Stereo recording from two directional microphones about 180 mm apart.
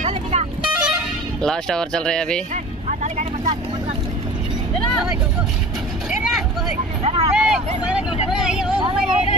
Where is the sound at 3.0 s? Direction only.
40° right (ahead or behind).